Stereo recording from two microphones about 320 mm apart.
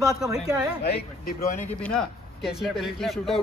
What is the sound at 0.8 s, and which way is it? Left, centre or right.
Speech, left.